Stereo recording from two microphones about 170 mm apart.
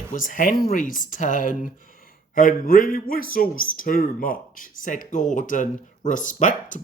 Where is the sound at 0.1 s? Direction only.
50° left (ahead or behind).